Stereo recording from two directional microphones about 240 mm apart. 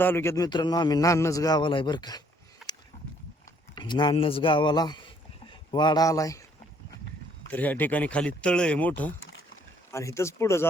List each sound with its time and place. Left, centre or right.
0.0 s a man's voice: centre
2.6 s a sound: centre
3.8 s speech: centre
7.5 s a man's voice: centre